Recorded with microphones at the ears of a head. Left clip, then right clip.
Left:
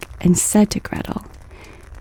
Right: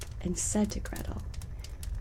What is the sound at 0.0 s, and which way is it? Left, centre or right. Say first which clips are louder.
Speech: left 16 dB; left.